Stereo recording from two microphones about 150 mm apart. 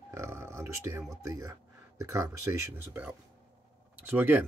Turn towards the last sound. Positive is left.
turn(degrees=-10)  # may be behind; listen again after turning